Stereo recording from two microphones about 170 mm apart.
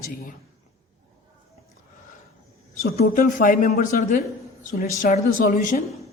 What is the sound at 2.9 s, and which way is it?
A woman's voice, 55° left (ahead or behind).